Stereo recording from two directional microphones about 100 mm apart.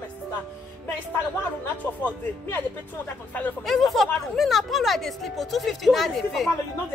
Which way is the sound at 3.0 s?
20° left (ahead or behind).